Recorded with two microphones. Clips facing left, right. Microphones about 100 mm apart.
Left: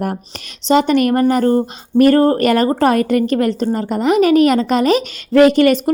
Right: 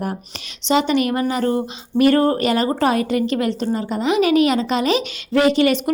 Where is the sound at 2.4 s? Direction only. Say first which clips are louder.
Left 5 dB; 55° left (ahead or behind).